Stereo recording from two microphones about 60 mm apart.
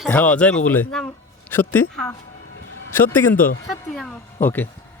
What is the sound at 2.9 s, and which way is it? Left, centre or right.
Speech, left.